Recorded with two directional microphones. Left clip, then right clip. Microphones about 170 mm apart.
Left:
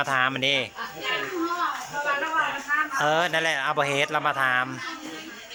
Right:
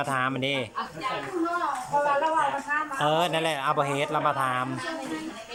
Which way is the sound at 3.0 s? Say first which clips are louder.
Even; 5° right (ahead or behind).